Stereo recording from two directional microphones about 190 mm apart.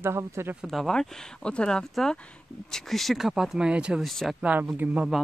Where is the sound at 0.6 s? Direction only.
Centre (ahead or behind).